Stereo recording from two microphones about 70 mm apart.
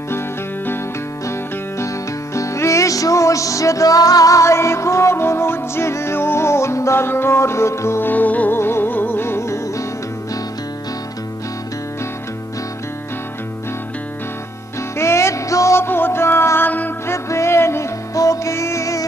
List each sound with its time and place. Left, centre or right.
1.2 s music: left
8.1 s music: left
8.5 s music: left
15.0 s music: left
17.1 s music: left